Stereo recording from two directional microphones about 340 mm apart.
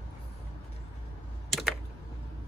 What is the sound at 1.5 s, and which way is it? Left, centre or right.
Typing, centre.